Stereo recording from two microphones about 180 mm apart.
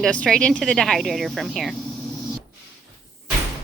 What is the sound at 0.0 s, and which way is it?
Speech, 5° left (ahead or behind).